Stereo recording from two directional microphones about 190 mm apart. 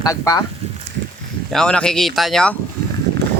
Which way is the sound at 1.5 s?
5° left (ahead or behind).